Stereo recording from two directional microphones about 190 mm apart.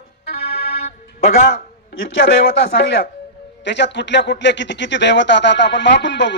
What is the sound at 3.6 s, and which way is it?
A man's voice, 65° left (ahead or behind).